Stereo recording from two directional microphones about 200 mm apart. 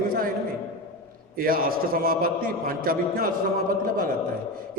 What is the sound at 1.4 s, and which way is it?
A man's voice, 45° right (ahead or behind).